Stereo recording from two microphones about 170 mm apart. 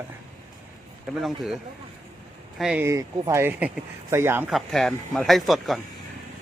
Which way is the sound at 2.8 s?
15° right (ahead or behind).